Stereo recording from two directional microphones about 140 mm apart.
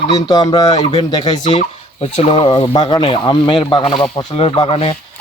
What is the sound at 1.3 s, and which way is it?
Speech, 45° left (ahead or behind).